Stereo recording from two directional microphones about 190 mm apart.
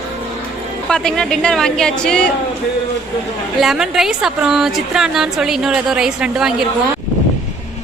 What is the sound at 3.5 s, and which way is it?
A woman's voice, centre (ahead or behind).